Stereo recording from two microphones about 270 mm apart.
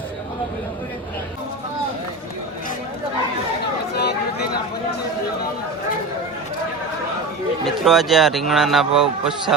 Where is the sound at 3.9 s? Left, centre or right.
Left.